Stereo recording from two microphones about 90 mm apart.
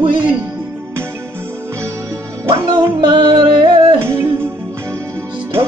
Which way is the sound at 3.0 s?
55° right (ahead or behind).